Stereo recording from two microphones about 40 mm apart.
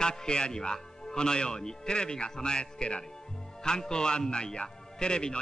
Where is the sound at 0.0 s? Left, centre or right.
Centre.